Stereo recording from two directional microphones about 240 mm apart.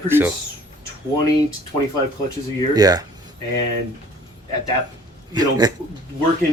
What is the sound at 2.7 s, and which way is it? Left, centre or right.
Speech, centre.